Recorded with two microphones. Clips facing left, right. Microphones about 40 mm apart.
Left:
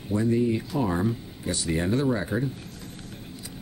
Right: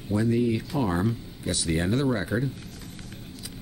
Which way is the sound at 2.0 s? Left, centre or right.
Right.